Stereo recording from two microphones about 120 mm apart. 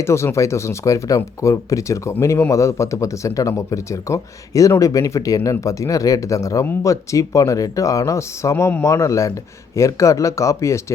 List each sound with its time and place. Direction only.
0.0 s speech: 20° left (ahead or behind)